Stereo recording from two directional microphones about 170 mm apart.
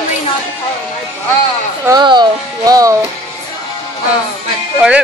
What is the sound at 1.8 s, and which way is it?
Speech, 25° right (ahead or behind).